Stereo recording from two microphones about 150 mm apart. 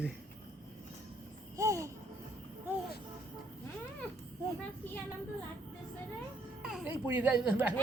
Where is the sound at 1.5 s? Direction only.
20° right (ahead or behind).